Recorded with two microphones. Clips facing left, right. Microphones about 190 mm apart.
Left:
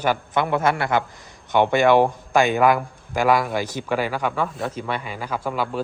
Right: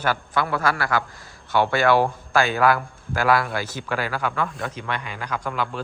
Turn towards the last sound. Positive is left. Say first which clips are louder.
# left 2 dB
turn(degrees=5)  # may be behind; listen again after turning